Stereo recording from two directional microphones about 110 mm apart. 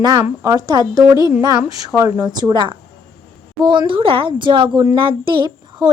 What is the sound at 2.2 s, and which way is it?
A woman's voice, 40° right (ahead or behind).